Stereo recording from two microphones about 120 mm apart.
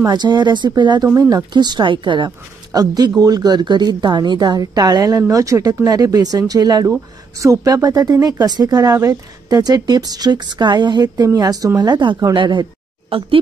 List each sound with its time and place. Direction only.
0.0 s speech: 35° right (ahead or behind)
1.0 s speech: 20° right (ahead or behind)
1.3 s speech: 35° right (ahead or behind)
13.1 s speech: 50° right (ahead or behind)